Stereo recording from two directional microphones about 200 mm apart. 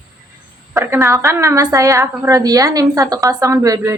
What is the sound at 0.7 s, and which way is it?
A woman's voice, 15° right (ahead or behind).